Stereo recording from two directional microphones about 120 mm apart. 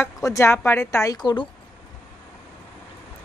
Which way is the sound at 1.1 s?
35° left (ahead or behind).